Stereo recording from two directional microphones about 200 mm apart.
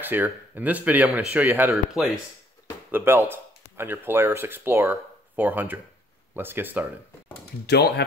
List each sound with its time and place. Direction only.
0.0 s speech: 10° right (ahead or behind)
7.6 s speech: 55° left (ahead or behind)